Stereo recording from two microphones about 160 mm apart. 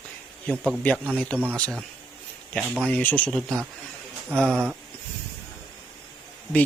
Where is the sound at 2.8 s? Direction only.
10° left (ahead or behind).